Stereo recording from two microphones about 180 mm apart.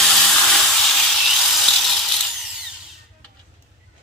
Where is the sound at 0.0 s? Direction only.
Centre (ahead or behind).